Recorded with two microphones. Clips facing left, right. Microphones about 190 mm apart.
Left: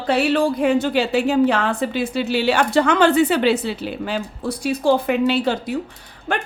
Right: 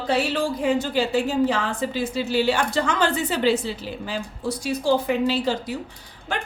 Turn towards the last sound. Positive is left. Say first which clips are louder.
# left 5 dB
turn(degrees=60)  # may be behind; listen again after turning